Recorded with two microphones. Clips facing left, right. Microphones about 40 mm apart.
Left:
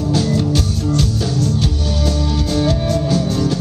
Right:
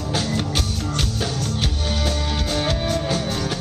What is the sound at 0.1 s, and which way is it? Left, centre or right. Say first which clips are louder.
Music: left 6 dB; right.